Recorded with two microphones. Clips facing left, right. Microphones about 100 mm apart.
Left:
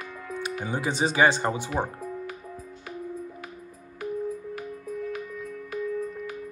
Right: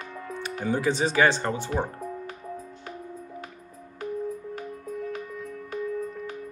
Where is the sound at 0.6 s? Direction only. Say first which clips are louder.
Right 3 dB; 15° left (ahead or behind).